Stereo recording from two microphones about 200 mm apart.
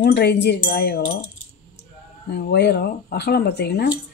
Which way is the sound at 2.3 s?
55° left (ahead or behind).